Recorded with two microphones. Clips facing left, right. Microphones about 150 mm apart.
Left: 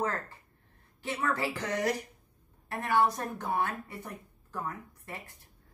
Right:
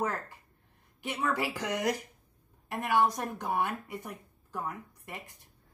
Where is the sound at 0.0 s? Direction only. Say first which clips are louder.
Even; 10° right (ahead or behind).